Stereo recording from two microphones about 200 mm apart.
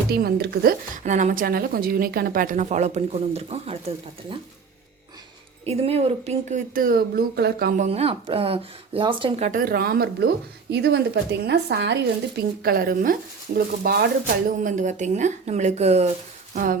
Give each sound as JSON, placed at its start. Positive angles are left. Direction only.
{"t": 0.1, "sound": "speech", "side_deg": -50}
{"t": 5.6, "sound": "speech", "side_deg": -30}
{"t": 7.9, "sound": "speech", "side_deg": -30}
{"t": 12.6, "sound": "speech", "side_deg": -45}